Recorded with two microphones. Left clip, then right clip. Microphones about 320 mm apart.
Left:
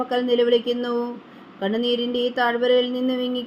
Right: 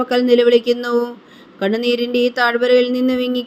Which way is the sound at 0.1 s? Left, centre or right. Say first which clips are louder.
Right 7 dB; right.